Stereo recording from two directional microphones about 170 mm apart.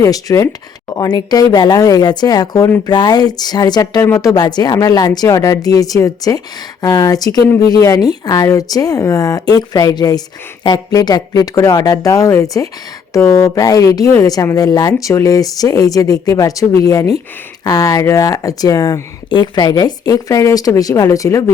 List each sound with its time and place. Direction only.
0.0 s speech: 20° left (ahead or behind)